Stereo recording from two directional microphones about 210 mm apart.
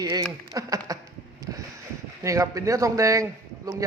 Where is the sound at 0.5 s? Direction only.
15° right (ahead or behind).